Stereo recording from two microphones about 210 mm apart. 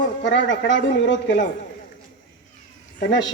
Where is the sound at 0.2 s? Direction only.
60° left (ahead or behind).